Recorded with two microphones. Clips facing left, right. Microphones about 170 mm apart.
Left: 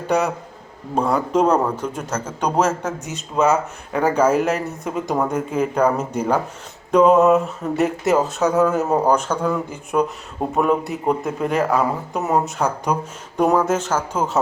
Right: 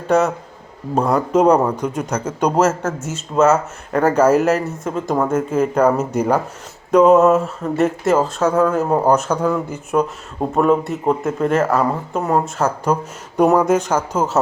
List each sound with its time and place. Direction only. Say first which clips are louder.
0.9 s speech: right 3 dB; 5° right (ahead or behind)
9.0 s speech: right 3 dB; 10° right (ahead or behind)